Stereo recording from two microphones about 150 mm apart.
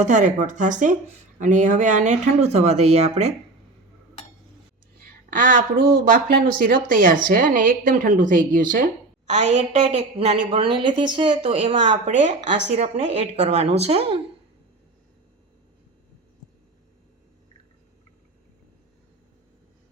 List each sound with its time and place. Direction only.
0.0 s speech: 55° right (ahead or behind)
6.2 s speech: 70° right (ahead or behind); by 11.7 s 35° right (ahead or behind)
11.7 s speech: 50° right (ahead or behind)